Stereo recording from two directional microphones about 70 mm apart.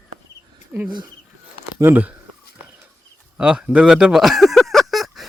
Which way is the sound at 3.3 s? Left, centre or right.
Centre.